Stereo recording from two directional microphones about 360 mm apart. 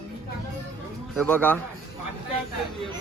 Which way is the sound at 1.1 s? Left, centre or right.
Centre.